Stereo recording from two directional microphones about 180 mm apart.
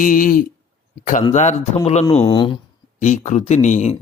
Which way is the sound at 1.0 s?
45° left (ahead or behind).